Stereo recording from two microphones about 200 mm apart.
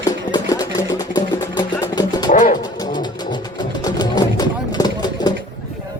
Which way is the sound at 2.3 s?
40° left (ahead or behind).